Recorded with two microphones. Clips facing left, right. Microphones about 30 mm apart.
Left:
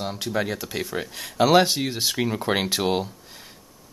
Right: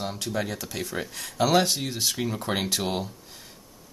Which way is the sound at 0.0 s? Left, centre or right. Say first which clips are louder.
Left 3 dB; centre.